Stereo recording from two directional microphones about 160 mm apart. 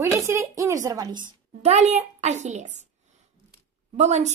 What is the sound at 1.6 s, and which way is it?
Speech, 45° right (ahead or behind).